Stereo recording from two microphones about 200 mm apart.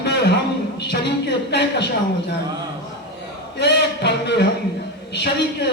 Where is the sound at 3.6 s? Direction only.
55° left (ahead or behind).